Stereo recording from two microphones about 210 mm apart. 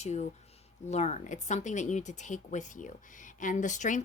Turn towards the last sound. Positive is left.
turn(degrees=35)  # may be behind; listen again after turning